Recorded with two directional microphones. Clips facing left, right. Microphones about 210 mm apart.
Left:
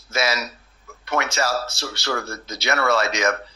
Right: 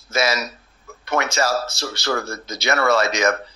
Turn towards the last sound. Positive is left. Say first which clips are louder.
# right 2 dB
turn(degrees=-40)  # may be behind; listen again after turning